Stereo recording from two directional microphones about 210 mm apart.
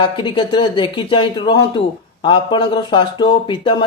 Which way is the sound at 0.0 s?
25° left (ahead or behind).